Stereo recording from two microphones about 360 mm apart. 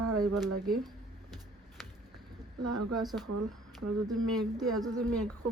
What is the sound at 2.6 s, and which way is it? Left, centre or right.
Speech, centre.